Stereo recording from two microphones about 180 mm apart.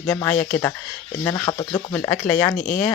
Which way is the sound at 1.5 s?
25° left (ahead or behind).